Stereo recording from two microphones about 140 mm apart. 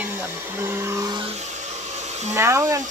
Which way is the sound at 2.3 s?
20° right (ahead or behind).